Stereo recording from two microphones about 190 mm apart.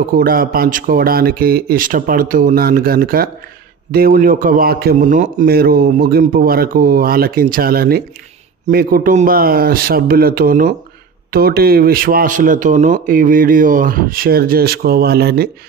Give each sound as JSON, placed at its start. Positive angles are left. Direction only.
{"t": 0.1, "sound": "speech", "side_deg": -50}
{"t": 5.4, "sound": "speech", "side_deg": -55}